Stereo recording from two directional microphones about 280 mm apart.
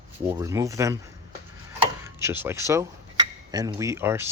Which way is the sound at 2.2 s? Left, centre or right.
Centre.